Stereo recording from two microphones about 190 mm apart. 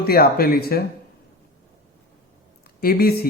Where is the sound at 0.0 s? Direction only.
55° left (ahead or behind).